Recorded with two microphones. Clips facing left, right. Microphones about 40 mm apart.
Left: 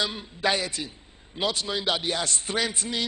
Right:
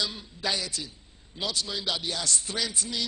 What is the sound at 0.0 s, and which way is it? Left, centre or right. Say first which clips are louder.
A man's voice: left 5 dB; left.